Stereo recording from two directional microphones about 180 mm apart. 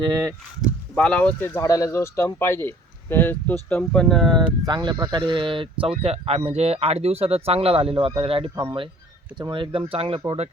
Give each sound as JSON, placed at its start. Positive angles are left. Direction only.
{"t": 0.0, "sound": "speech", "side_deg": -20}
{"t": 0.9, "sound": "speech", "side_deg": 5}
{"t": 4.6, "sound": "speech", "side_deg": -25}